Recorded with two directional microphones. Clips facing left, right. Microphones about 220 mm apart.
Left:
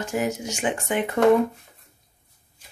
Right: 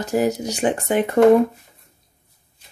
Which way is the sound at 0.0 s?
35° right (ahead or behind).